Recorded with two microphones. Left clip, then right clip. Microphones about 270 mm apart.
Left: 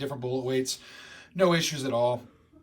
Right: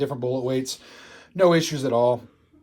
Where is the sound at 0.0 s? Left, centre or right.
Centre.